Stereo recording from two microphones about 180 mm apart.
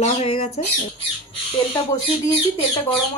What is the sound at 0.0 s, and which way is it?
Speech, 35° left (ahead or behind).